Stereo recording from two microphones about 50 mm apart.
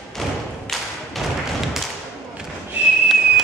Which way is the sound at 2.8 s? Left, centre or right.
Right.